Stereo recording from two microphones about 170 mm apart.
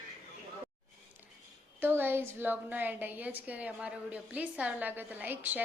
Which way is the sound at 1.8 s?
10° right (ahead or behind).